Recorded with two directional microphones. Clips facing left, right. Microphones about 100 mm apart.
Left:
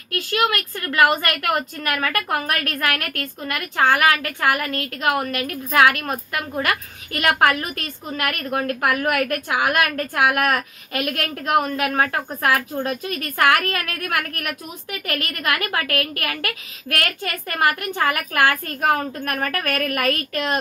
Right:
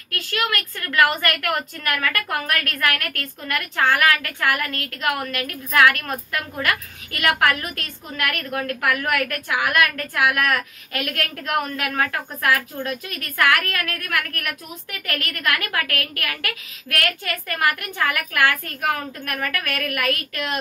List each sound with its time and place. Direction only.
0.1 s a woman's voice: 25° left (ahead or behind)